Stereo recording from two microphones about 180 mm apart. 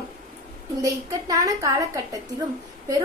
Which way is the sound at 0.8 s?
20° right (ahead or behind).